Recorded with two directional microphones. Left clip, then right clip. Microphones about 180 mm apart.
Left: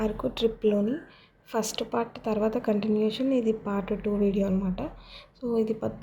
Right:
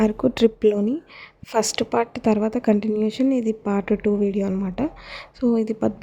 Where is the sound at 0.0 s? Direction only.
45° right (ahead or behind).